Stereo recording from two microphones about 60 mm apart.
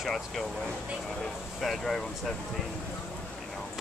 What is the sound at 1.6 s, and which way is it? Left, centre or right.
Speech, centre.